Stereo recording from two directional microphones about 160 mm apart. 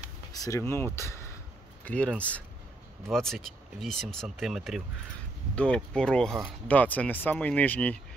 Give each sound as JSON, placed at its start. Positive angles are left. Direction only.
{"t": 0.3, "sound": "speech", "side_deg": 20}